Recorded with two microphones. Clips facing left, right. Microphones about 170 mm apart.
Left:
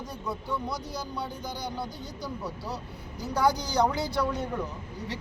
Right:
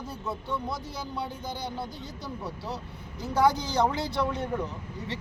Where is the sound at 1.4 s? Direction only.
25° right (ahead or behind).